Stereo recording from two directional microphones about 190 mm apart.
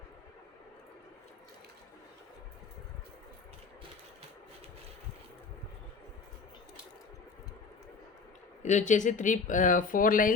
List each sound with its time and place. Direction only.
8.6 s speech: 40° left (ahead or behind)